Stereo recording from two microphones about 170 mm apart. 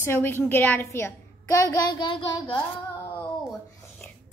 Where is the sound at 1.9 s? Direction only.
30° left (ahead or behind).